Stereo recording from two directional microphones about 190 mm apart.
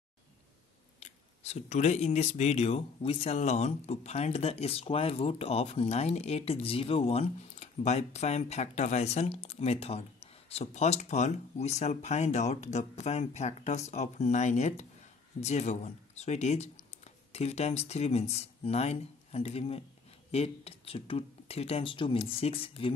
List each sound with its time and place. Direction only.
0.9 s speech: 35° left (ahead or behind)